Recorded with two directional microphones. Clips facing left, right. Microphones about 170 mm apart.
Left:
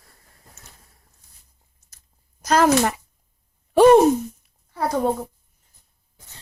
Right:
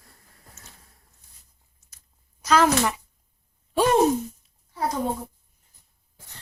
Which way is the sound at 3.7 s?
65° left (ahead or behind).